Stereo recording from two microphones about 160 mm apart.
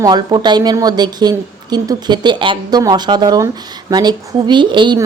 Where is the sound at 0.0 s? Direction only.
25° right (ahead or behind).